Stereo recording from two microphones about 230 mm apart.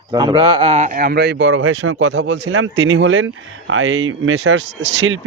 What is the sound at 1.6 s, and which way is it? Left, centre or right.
Speech, right.